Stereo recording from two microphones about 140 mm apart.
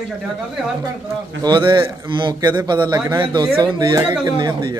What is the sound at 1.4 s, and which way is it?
A man's voice, 35° right (ahead or behind).